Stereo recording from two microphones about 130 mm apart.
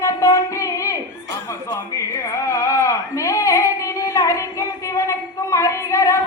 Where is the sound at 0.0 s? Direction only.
25° left (ahead or behind).